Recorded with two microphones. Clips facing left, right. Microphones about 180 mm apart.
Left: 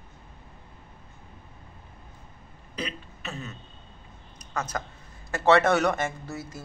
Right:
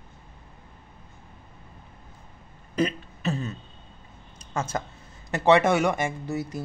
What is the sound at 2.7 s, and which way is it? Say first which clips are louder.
Speech: right 10 dB; 40° right (ahead or behind).